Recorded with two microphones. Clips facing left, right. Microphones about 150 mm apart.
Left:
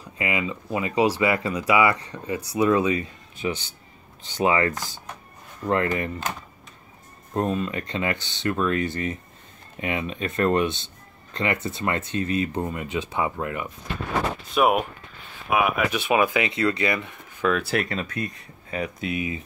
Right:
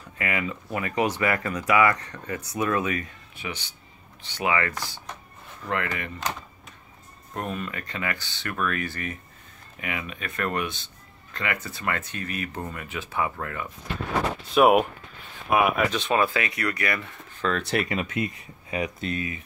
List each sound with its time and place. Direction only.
0.2 s speech: 20° left (ahead or behind); by 6.1 s 35° left (ahead or behind)
7.3 s speech: 25° left (ahead or behind)
14.5 s speech: centre (ahead or behind)
18.0 s speech: 20° right (ahead or behind)
18.9 s speech: 5° left (ahead or behind)